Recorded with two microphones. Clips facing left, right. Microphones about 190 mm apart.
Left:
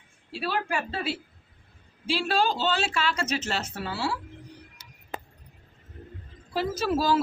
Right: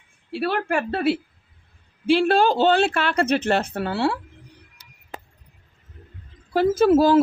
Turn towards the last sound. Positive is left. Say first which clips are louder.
# right 9 dB
turn(degrees=-55)  # may be behind; listen again after turning